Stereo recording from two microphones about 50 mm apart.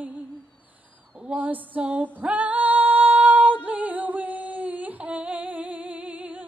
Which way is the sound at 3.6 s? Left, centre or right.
Right.